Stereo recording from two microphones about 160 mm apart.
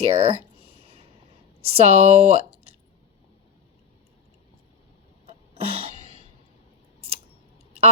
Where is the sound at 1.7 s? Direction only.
40° right (ahead or behind).